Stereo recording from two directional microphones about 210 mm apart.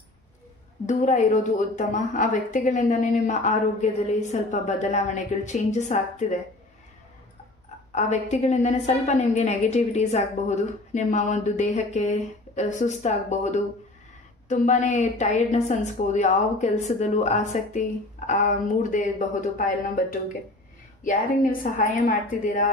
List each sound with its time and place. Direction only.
0.8 s a woman's voice: 35° left (ahead or behind)
7.9 s a woman's voice: 30° left (ahead or behind)